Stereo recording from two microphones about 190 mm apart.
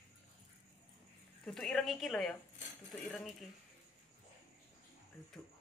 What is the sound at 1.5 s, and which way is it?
Speech, centre (ahead or behind).